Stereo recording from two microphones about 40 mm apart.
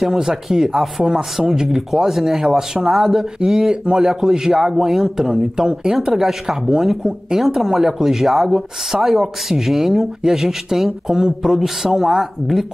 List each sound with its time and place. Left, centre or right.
0.0 s a man's voice: centre